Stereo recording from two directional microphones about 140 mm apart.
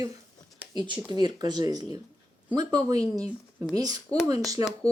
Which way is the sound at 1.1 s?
30° right (ahead or behind).